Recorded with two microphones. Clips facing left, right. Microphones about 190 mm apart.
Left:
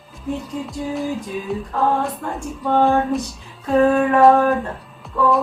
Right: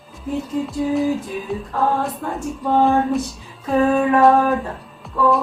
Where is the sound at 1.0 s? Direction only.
Centre (ahead or behind).